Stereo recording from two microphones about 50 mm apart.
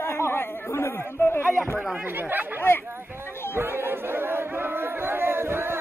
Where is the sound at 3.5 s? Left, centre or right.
Right.